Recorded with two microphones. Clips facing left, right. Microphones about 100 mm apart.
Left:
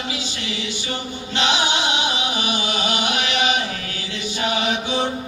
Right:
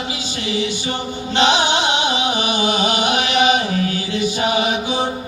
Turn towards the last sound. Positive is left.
turn(degrees=-15)  # may be behind; listen again after turning